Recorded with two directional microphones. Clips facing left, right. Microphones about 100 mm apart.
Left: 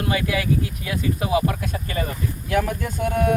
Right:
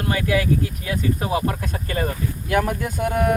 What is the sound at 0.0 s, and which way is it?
Speech, 40° right (ahead or behind).